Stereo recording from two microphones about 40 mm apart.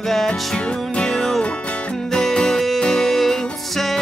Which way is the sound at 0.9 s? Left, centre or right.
Centre.